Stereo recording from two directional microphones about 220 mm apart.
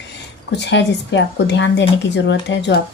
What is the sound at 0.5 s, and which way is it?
A woman's voice, 55° left (ahead or behind).